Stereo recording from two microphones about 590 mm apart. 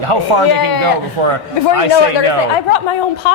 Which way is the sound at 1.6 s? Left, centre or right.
Left.